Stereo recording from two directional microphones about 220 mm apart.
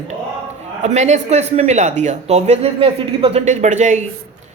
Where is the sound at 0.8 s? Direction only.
30° right (ahead or behind).